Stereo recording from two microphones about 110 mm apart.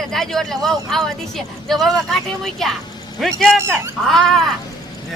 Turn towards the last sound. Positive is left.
turn(degrees=5)  # may be behind; listen again after turning